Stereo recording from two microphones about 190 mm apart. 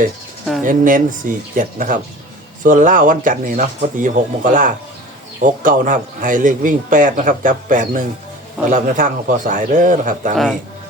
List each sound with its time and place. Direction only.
0.6 s speech: 45° right (ahead or behind)